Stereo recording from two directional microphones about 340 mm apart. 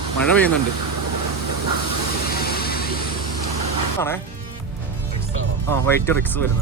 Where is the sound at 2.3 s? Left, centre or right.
Left.